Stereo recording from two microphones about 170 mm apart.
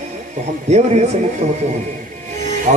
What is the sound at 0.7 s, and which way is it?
Speech, 40° right (ahead or behind).